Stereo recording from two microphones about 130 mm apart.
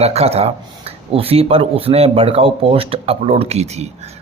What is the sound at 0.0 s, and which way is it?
Speech, 55° right (ahead or behind).